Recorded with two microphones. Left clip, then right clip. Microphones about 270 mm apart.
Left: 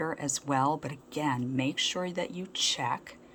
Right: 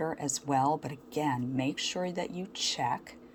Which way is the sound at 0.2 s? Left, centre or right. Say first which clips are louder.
Even; centre.